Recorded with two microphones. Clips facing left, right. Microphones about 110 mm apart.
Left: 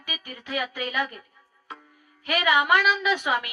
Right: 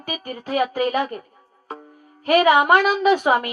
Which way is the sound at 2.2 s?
45° right (ahead or behind).